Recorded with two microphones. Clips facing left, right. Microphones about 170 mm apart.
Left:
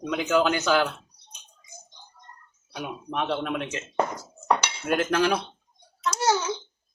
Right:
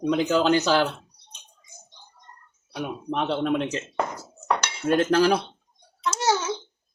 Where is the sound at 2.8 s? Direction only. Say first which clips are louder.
Right 3 dB; 30° right (ahead or behind).